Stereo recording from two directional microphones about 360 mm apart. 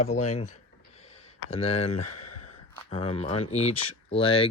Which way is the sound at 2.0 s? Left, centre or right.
Left.